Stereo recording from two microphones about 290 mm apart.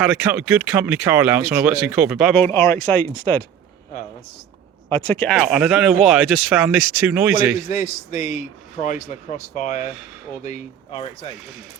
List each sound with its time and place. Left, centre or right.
0.0 s speech: centre
4.9 s a man's voice: centre
9.0 s speech: left